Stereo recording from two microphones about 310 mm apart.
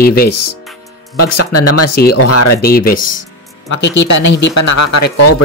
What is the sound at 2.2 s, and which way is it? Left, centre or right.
Speech, left.